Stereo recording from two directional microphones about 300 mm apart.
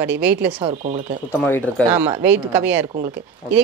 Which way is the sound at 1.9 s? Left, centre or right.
Centre.